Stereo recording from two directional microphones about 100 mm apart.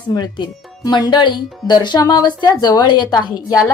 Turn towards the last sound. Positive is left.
turn(degrees=40)  # may be behind; listen again after turning